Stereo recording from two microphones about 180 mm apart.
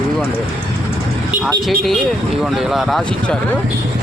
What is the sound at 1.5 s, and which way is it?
Speech, centre (ahead or behind).